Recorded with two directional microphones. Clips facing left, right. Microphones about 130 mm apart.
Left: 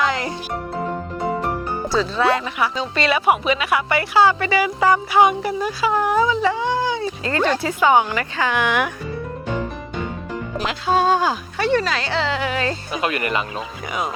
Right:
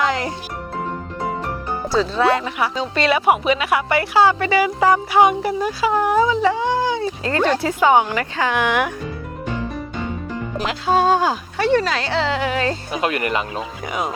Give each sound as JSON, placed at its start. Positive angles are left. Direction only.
{"t": 0.0, "sound": "music", "side_deg": -45}
{"t": 2.3, "sound": "a woman's voice", "side_deg": -40}
{"t": 6.8, "sound": "a sound", "side_deg": -40}
{"t": 7.5, "sound": "a woman's voice", "side_deg": -35}
{"t": 10.7, "sound": "a woman's voice", "side_deg": -40}
{"t": 11.9, "sound": "speech", "side_deg": -45}